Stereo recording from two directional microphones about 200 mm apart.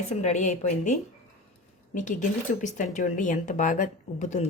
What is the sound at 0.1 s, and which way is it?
A woman's voice, 35° left (ahead or behind).